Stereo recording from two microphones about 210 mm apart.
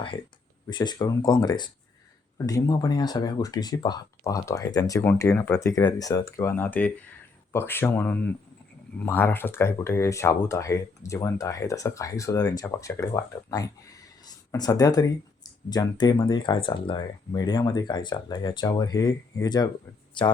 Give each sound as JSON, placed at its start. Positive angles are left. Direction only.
{"t": 0.7, "sound": "speech", "side_deg": 20}